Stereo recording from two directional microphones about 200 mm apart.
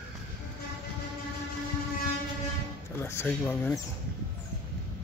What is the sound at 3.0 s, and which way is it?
Speech, 10° left (ahead or behind).